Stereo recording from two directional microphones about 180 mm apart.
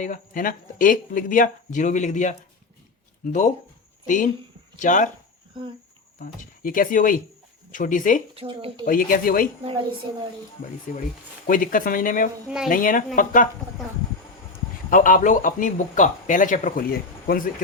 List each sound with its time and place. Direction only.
0.0 s speech: 50° left (ahead or behind)
4.0 s speech: 45° left (ahead or behind)
6.1 s speech: 50° left (ahead or behind)
8.4 s speech: 30° right (ahead or behind)
8.9 s speech: 50° left (ahead or behind)
10.9 s speech: 45° left (ahead or behind)
14.8 s speech: 50° left (ahead or behind)